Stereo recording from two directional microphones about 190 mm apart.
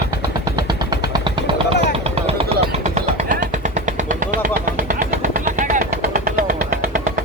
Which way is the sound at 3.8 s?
45° right (ahead or behind).